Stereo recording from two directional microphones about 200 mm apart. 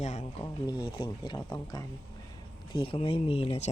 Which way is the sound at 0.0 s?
35° left (ahead or behind).